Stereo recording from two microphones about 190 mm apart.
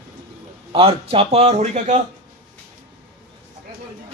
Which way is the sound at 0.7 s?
30° right (ahead or behind).